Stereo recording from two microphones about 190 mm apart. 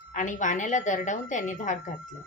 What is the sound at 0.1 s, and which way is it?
A woman's voice, 40° left (ahead or behind).